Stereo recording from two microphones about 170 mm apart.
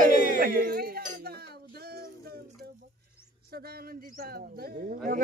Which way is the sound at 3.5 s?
65° right (ahead or behind).